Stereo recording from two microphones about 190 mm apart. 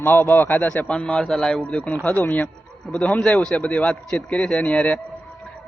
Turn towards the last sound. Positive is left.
turn(degrees=5)  # may be behind; listen again after turning